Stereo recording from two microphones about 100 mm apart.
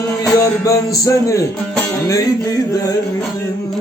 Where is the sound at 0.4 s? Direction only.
35° left (ahead or behind).